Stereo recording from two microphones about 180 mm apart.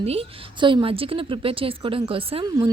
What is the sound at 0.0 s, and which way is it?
A woman's voice, 35° right (ahead or behind).